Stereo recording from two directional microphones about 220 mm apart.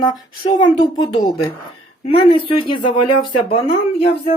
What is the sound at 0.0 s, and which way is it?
Speech, 20° left (ahead or behind).